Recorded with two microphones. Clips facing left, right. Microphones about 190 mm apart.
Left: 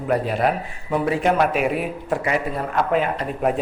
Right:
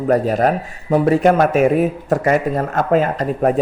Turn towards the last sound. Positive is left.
turn(degrees=-40)  # may be behind; listen again after turning